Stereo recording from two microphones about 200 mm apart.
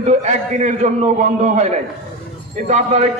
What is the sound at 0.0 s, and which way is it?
A man's voice, 35° right (ahead or behind).